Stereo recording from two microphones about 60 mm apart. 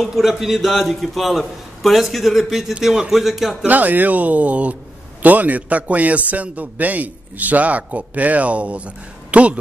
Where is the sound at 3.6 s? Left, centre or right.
Right.